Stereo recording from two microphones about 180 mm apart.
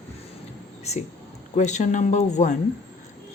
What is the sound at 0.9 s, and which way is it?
Speech, 35° left (ahead or behind).